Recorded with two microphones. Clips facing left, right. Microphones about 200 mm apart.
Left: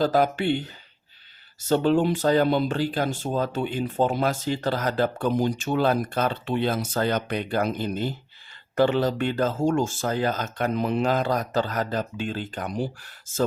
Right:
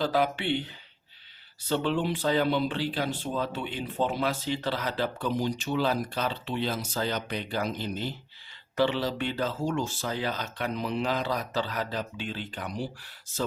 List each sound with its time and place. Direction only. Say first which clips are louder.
0.0 s speech: left 5 dB; 45° left (ahead or behind)